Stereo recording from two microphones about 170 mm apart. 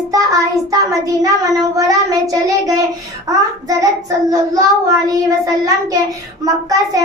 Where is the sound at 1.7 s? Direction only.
20° right (ahead or behind).